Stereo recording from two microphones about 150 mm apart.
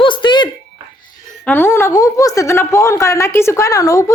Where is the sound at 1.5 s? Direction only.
15° left (ahead or behind).